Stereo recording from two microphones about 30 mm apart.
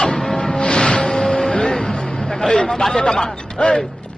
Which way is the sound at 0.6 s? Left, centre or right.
Left.